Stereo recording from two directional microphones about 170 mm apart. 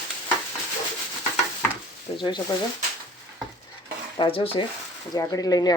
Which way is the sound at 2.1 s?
25° left (ahead or behind).